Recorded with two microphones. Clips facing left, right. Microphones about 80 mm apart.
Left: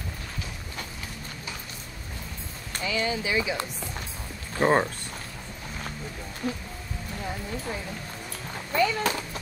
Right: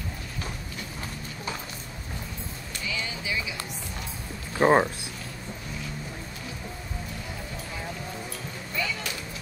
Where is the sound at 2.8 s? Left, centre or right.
Left.